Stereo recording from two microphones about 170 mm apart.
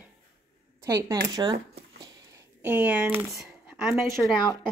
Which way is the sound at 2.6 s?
10° right (ahead or behind).